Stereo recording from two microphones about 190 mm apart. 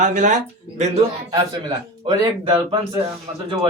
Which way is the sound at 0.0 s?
40° right (ahead or behind).